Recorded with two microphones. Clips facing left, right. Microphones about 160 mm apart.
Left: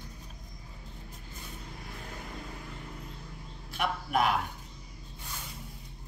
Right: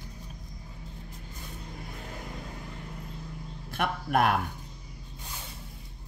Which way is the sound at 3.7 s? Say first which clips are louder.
Right 2 dB; 55° right (ahead or behind).